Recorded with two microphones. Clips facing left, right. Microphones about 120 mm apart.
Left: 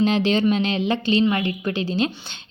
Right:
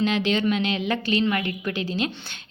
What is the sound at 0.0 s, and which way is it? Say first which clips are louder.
Speech: left 4 dB; 35° left (ahead or behind).